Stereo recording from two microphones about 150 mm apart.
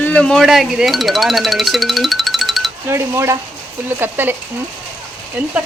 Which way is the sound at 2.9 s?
20° right (ahead or behind).